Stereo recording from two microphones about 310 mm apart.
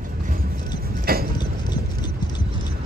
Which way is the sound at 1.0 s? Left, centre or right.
Right.